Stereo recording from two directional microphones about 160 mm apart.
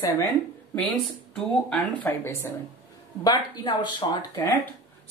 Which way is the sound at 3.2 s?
25° left (ahead or behind).